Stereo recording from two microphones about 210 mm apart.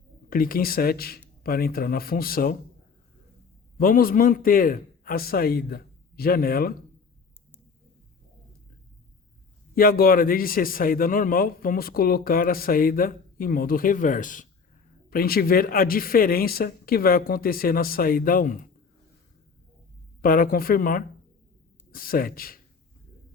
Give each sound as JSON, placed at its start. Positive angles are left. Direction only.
{"t": 0.3, "sound": "a man's voice", "side_deg": 45}
{"t": 3.8, "sound": "a man's voice", "side_deg": 45}
{"t": 9.7, "sound": "a man's voice", "side_deg": 45}
{"t": 20.2, "sound": "a man's voice", "side_deg": 45}